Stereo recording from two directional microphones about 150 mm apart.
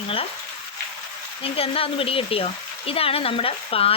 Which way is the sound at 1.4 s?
40° left (ahead or behind).